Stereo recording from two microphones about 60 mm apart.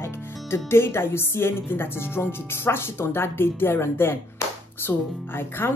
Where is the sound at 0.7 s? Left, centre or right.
Left.